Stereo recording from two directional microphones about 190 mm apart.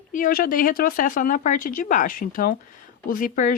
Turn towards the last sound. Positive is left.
turn(degrees=45)  # may be behind; listen again after turning